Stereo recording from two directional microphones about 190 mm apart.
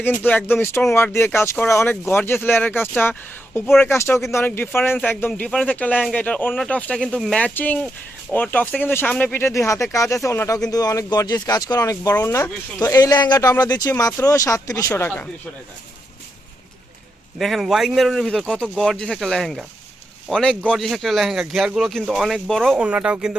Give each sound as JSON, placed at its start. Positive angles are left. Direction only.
{"t": 0.0, "sound": "speech", "side_deg": 10}
{"t": 17.3, "sound": "speech", "side_deg": 0}